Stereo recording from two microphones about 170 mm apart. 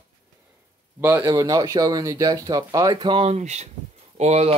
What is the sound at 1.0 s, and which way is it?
Speech, 15° right (ahead or behind).